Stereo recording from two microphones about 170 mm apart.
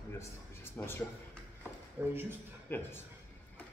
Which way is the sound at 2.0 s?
10° right (ahead or behind).